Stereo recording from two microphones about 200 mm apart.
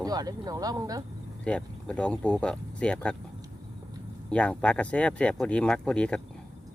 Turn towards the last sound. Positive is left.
turn(degrees=5)  # may be behind; listen again after turning